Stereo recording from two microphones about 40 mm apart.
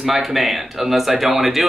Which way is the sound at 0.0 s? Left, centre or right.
Centre.